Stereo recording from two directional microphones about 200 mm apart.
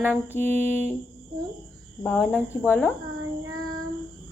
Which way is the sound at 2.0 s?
10° left (ahead or behind).